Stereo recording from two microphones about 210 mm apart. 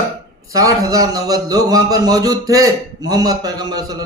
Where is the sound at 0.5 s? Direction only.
15° right (ahead or behind).